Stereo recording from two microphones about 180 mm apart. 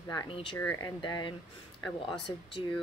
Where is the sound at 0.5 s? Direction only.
15° left (ahead or behind).